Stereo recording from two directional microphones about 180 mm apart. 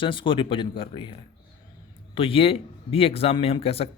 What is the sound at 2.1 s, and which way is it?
Speech, 30° left (ahead or behind).